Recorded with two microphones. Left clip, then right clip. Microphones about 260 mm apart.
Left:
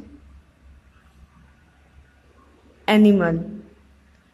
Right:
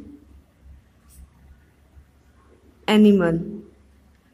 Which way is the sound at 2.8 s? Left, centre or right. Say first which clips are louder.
Even; centre.